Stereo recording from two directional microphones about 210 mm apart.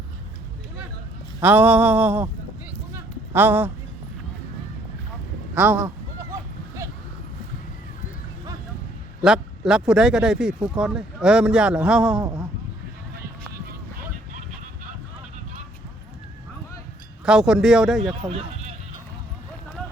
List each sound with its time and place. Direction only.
1.4 s a sound: 10° right (ahead or behind)
5.5 s a sound: 5° right (ahead or behind)
9.2 s speech: 5° right (ahead or behind)
12.2 s speech: 20° right (ahead or behind)
17.2 s speech: 5° right (ahead or behind)
18.1 s speech: 25° right (ahead or behind)